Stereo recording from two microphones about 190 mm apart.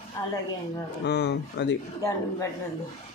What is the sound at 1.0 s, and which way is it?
Speech, 65° left (ahead or behind).